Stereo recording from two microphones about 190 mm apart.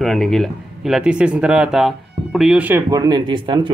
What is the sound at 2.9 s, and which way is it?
Speech, 20° right (ahead or behind).